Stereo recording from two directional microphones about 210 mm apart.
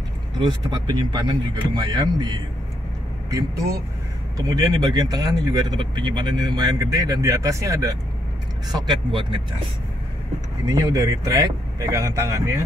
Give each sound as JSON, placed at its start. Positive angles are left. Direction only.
{"t": 0.4, "sound": "speech", "side_deg": -20}
{"t": 10.7, "sound": "speech", "side_deg": -15}